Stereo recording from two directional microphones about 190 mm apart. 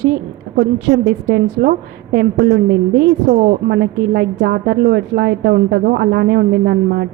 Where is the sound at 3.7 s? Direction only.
60° right (ahead or behind).